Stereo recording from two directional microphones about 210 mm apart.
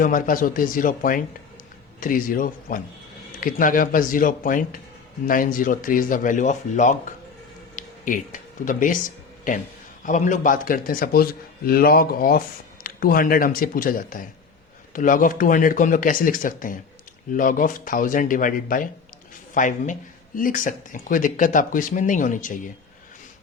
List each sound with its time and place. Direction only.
0.0 s speech: 40° left (ahead or behind)
7.8 s a sound: 40° left (ahead or behind)
10.0 s speech: 35° left (ahead or behind)